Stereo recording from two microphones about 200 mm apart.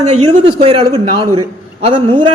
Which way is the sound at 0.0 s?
35° right (ahead or behind).